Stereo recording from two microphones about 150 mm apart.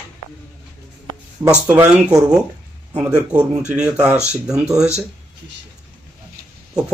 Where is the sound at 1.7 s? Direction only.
10° right (ahead or behind).